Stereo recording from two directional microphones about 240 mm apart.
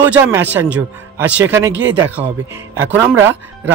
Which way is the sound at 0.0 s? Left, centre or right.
Centre.